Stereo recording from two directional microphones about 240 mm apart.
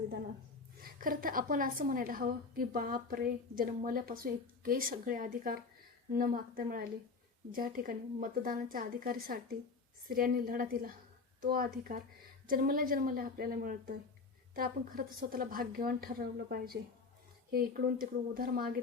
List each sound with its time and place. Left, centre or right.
0.8 s a woman's voice: right